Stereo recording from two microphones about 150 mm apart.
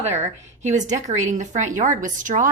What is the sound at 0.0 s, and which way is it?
A woman's voice, 50° right (ahead or behind).